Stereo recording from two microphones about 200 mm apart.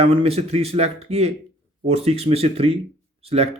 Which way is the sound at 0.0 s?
30° right (ahead or behind).